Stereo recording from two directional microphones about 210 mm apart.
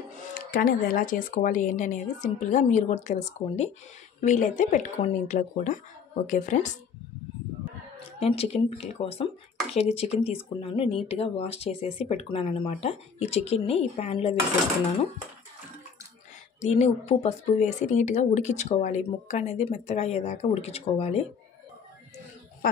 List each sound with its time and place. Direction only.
0.3 s speech: 40° left (ahead or behind)
8.2 s speech: 30° left (ahead or behind)
16.6 s speech: 30° left (ahead or behind)